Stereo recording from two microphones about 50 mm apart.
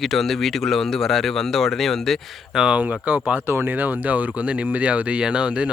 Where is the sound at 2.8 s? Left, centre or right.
Right.